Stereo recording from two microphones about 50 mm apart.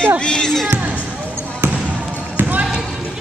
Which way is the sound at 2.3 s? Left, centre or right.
Right.